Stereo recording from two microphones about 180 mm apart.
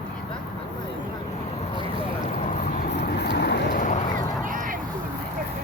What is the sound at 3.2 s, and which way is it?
Vehicle, 65° left (ahead or behind).